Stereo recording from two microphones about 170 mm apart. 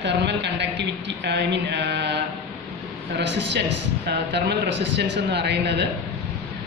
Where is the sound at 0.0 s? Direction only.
90° right.